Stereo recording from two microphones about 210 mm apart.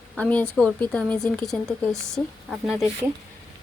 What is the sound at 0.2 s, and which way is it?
Speech, 5° left (ahead or behind).